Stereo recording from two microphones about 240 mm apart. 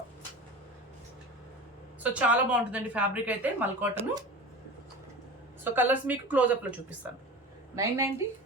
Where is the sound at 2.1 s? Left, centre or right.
Centre.